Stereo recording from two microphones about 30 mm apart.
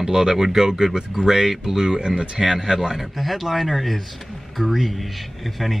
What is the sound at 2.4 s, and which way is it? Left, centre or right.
Speech, centre.